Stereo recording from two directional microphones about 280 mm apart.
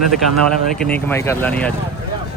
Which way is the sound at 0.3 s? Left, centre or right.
Centre.